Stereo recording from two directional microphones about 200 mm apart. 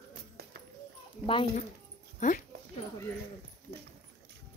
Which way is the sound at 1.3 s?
25° left (ahead or behind).